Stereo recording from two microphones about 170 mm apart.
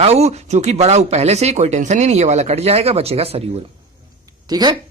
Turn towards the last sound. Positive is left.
turn(degrees=-25)  # may be behind; listen again after turning